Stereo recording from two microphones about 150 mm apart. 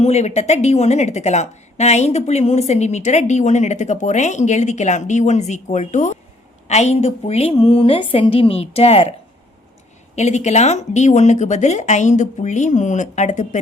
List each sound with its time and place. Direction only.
0.0 s a woman's voice: 45° left (ahead or behind)
10.2 s speech: 50° left (ahead or behind)